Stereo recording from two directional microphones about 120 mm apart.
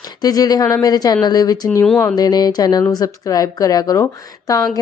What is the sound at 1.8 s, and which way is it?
Speech, 10° left (ahead or behind).